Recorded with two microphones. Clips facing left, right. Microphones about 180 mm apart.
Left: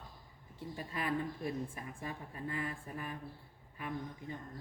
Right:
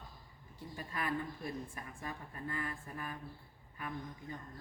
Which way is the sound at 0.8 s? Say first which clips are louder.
Left 2 dB; 25° left (ahead or behind).